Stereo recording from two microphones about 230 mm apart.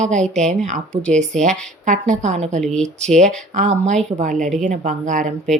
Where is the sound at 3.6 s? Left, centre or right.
Right.